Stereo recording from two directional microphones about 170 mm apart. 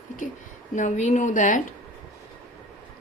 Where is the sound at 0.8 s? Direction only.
45° left (ahead or behind).